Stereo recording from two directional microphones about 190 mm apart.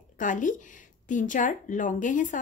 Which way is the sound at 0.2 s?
45° left (ahead or behind).